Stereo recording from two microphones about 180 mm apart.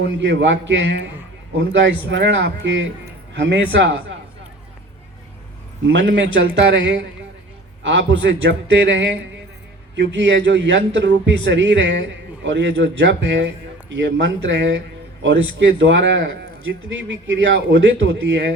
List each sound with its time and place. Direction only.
0.0 s a man's voice: 80° right
3.3 s a man's voice: 80° right
5.8 s a man's voice: 90° right; by 14.8 s 70° right (ahead or behind)
15.2 s a man's voice: 85° right